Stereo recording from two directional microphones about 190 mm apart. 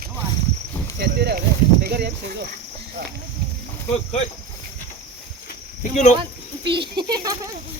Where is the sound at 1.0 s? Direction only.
60° right (ahead or behind).